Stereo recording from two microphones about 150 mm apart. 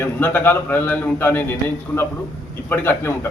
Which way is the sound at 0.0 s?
15° left (ahead or behind).